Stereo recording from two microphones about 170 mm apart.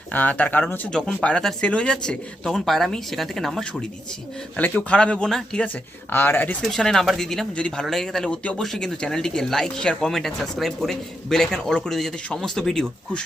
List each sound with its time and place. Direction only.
0.1 s speech: 10° left (ahead or behind)